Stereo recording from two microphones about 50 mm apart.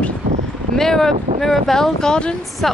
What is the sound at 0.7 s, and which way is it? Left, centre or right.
Speech, centre.